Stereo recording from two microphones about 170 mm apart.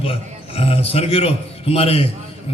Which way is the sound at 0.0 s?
35° left (ahead or behind).